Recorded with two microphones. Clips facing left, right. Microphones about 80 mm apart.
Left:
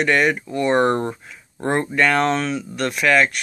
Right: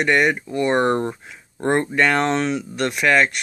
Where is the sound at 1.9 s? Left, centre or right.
Right.